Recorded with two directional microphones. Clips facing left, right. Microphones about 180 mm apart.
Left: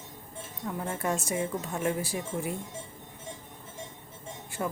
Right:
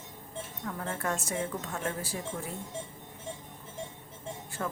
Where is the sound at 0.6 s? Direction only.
20° left (ahead or behind).